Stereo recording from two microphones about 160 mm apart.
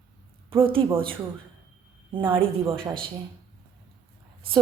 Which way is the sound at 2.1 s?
30° right (ahead or behind).